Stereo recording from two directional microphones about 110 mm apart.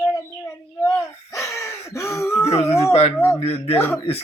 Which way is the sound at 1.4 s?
25° left (ahead or behind).